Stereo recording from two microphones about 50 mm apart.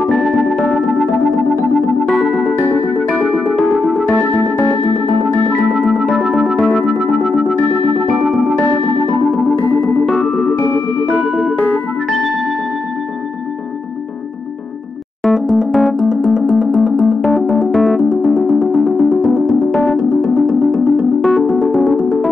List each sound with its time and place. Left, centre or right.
0.0 s music: centre
6.6 s music: centre
10.2 s music: centre
11.1 s music: centre
11.7 s music: centre
15.2 s electric piano: centre
18.5 s music: centre